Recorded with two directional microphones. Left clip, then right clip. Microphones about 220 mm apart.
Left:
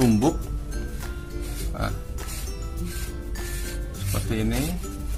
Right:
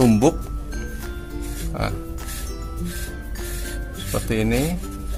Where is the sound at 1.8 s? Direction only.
40° right (ahead or behind).